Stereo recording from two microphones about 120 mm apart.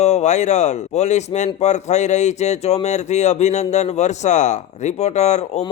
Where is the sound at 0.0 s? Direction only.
70° left (ahead or behind).